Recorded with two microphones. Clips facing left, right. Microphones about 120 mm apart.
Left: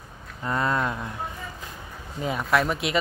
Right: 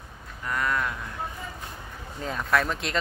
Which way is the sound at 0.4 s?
25° left (ahead or behind).